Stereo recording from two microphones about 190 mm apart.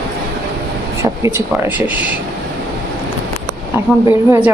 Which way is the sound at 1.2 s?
15° right (ahead or behind).